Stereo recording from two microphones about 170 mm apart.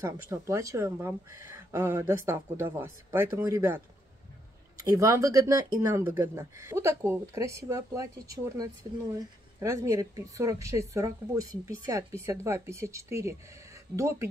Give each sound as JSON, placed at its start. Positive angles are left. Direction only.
{"t": 0.0, "sound": "speech", "side_deg": -15}